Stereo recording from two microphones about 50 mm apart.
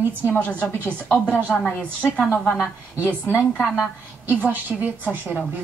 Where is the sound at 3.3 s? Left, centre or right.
Left.